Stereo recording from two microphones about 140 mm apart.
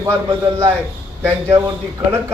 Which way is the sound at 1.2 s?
20° right (ahead or behind).